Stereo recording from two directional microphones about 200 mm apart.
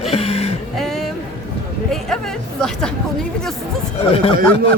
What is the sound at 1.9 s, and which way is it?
Speech, 5° left (ahead or behind).